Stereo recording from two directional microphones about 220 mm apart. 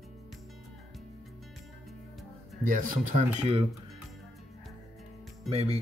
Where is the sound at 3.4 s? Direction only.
25° right (ahead or behind).